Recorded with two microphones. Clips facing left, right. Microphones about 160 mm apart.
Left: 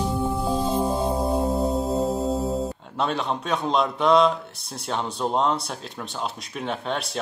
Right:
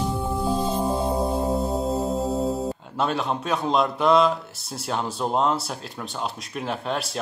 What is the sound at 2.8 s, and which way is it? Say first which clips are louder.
A man's voice: right 1 dB; centre (ahead or behind).